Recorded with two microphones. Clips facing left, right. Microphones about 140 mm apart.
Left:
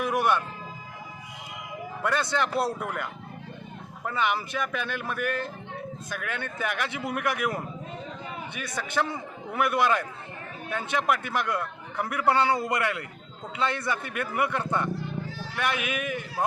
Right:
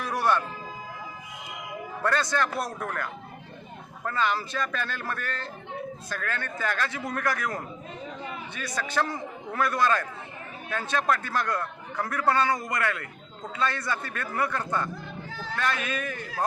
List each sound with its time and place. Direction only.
0.0 s vehicle: 20° left (ahead or behind)
2.3 s a man's voice: 20° left (ahead or behind)
12.6 s a man's voice: 15° left (ahead or behind)